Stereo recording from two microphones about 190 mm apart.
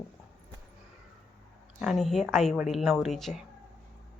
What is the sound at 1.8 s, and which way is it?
Speech, centre (ahead or behind).